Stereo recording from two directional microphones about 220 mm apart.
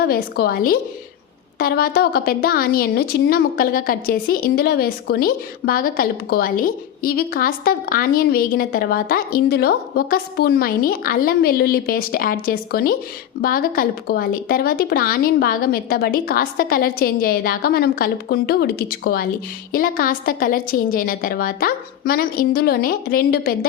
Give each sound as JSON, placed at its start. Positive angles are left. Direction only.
{"t": 0.0, "sound": "a woman's voice", "side_deg": 45}